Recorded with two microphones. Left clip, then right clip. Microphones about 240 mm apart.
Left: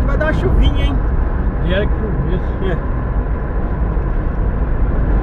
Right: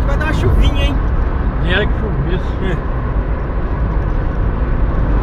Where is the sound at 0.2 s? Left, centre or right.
Centre.